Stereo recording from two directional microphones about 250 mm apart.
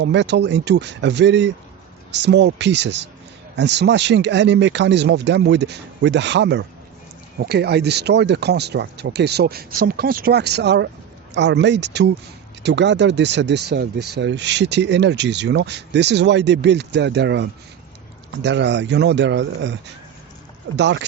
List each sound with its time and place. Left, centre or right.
0.0 s speech: right
20.7 s speech: right